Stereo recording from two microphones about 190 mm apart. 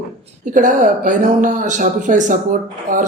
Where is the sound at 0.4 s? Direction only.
40° right (ahead or behind).